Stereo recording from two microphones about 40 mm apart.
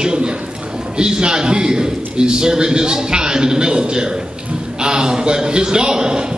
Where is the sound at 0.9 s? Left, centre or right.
Right.